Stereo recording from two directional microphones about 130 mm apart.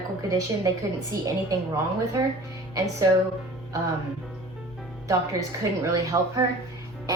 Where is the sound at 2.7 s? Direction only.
25° right (ahead or behind).